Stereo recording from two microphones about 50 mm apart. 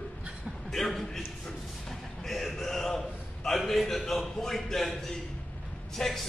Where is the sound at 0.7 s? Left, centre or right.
Centre.